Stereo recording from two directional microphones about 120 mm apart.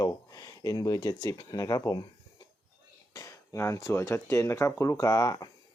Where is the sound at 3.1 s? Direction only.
25° left (ahead or behind).